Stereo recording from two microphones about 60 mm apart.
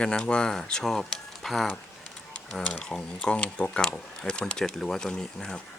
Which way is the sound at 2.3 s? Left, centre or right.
Centre.